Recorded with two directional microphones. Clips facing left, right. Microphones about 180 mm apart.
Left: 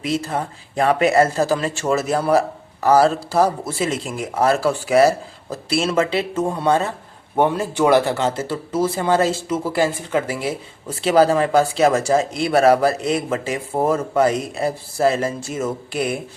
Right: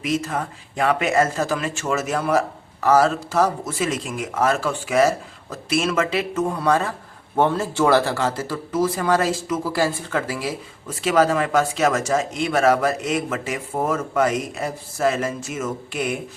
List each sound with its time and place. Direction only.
0.0 s speech: 30° left (ahead or behind)
7.3 s speech: 15° left (ahead or behind); by 16.1 s 35° left (ahead or behind)